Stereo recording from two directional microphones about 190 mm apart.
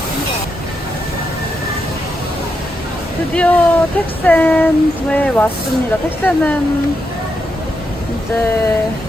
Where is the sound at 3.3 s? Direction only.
5° left (ahead or behind).